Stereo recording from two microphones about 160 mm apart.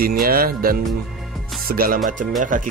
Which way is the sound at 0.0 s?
65° right (ahead or behind).